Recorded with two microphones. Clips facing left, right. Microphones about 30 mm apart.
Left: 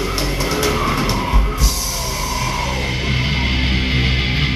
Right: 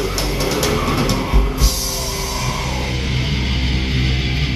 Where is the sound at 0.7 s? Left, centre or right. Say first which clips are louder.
Even; centre.